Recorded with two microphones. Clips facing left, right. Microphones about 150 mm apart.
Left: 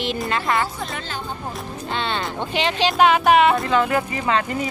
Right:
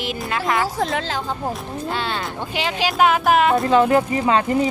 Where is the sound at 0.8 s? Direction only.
90° right.